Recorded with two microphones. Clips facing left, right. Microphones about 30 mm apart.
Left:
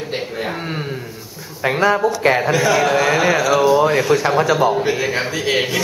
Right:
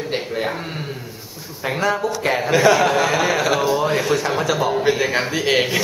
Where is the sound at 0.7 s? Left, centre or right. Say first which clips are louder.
Left 4 dB; centre.